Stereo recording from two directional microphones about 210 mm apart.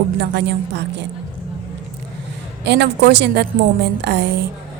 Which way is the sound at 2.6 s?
55° right (ahead or behind).